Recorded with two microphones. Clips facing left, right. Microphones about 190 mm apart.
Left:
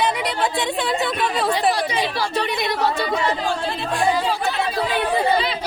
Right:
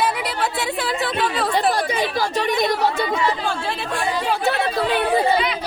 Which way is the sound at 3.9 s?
60° right (ahead or behind).